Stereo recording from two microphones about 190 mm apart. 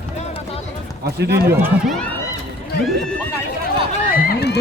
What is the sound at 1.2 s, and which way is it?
Speech, 60° right (ahead or behind).